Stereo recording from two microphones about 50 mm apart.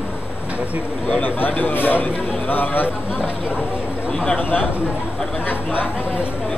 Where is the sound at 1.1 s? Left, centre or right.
Left.